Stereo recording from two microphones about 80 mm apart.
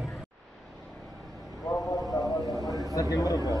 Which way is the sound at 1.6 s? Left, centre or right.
Left.